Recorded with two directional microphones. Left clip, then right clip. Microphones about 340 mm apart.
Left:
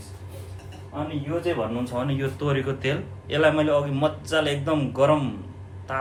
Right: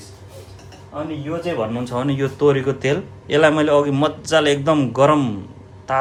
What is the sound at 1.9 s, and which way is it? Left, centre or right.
A man's voice, right.